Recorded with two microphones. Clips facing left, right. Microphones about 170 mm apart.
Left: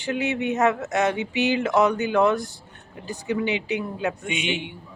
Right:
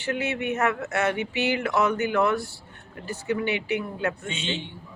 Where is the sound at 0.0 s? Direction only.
15° left (ahead or behind).